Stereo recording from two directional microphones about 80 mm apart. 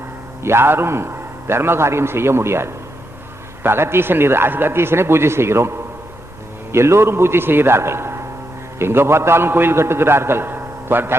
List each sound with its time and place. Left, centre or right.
0.4 s a man's voice: right
6.7 s a man's voice: right